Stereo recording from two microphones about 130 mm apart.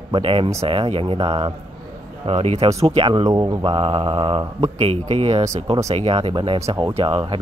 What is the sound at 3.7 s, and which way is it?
Speech, 45° right (ahead or behind).